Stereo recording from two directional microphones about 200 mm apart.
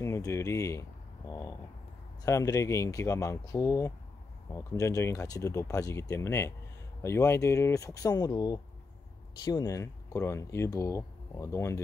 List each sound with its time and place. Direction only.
0.0 s speech: 15° left (ahead or behind)